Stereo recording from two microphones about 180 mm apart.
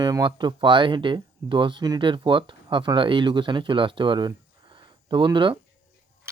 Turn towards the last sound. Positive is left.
turn(degrees=-25)  # may be behind; listen again after turning